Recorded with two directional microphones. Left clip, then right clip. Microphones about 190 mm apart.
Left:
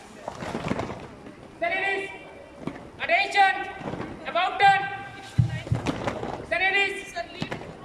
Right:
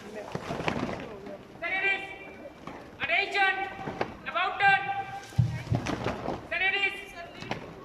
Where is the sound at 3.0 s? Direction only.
30° left (ahead or behind).